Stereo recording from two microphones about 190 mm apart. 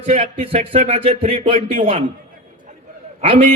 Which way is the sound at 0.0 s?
30° right (ahead or behind).